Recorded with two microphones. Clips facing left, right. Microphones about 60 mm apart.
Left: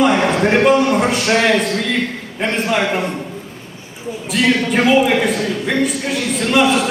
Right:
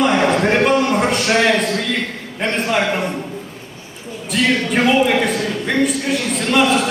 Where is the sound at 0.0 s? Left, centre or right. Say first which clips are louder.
Left 1 dB; centre.